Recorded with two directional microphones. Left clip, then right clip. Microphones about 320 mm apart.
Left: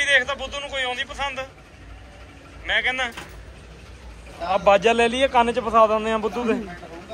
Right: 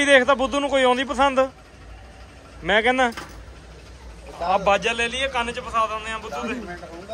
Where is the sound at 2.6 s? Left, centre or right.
Right.